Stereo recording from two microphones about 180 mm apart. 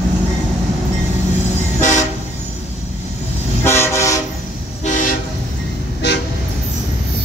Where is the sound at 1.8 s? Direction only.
45° left (ahead or behind).